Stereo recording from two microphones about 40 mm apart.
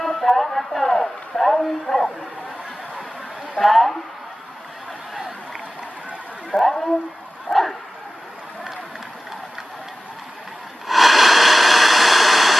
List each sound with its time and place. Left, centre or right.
0.0 s a man's voice: centre
3.6 s speech: centre
6.5 s speech: centre
7.5 s bow-wow: left
10.8 s a sound: centre